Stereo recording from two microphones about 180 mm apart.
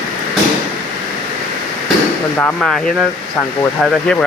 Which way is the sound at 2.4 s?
Centre (ahead or behind).